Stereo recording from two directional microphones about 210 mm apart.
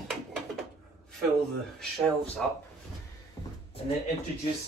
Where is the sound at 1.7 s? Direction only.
Centre (ahead or behind).